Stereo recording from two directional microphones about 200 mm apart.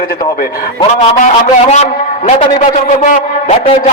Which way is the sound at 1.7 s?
35° left (ahead or behind).